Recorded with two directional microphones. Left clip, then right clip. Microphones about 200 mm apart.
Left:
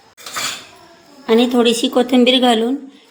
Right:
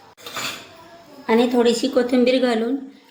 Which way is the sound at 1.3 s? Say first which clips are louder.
Left 3 dB; 40° left (ahead or behind).